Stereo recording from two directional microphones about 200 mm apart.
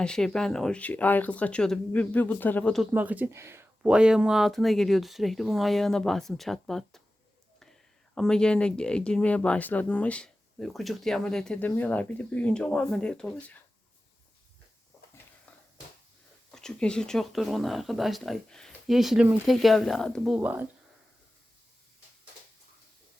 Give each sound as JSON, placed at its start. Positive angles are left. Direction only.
{"t": 0.0, "sound": "speech", "side_deg": 5}
{"t": 2.9, "sound": "speech", "side_deg": -10}
{"t": 8.1, "sound": "speech", "side_deg": 5}
{"t": 16.5, "sound": "speech", "side_deg": 5}